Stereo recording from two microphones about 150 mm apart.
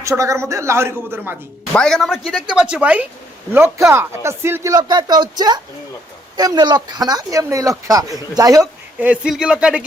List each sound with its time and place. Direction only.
0.0 s speech: 20° right (ahead or behind)
1.7 s speech: 5° left (ahead or behind); by 8.6 s 25° right (ahead or behind)
9.0 s speech: 5° right (ahead or behind)